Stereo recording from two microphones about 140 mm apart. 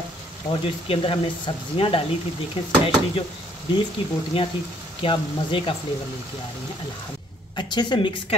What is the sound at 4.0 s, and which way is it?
Speech, 40° left (ahead or behind).